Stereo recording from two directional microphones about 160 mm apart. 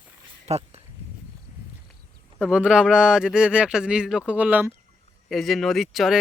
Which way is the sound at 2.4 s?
5° right (ahead or behind).